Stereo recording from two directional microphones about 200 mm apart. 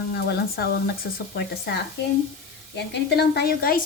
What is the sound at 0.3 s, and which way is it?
A woman's voice, 50° left (ahead or behind).